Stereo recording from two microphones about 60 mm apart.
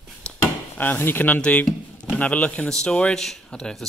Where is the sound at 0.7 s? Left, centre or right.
Left.